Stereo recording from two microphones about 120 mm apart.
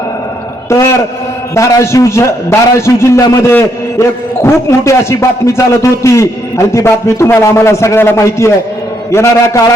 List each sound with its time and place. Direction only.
1.5 s a man's voice: 25° left (ahead or behind)